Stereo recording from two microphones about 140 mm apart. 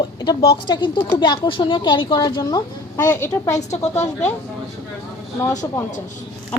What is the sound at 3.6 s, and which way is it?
Speech, 55° left (ahead or behind).